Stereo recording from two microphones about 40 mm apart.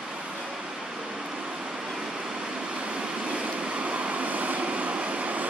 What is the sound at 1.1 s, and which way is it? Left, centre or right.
Vehicle, centre.